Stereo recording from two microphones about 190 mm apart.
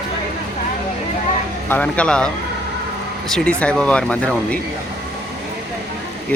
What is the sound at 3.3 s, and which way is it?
Speech, 5° left (ahead or behind).